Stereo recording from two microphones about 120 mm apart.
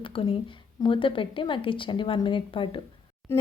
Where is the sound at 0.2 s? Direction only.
50° left (ahead or behind).